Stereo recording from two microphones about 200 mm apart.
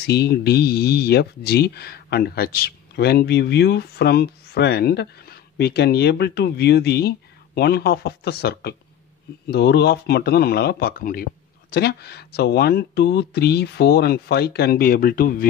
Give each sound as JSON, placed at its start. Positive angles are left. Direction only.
{"t": 0.0, "sound": "speech", "side_deg": 55}